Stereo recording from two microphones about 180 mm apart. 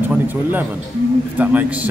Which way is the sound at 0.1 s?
10° right (ahead or behind).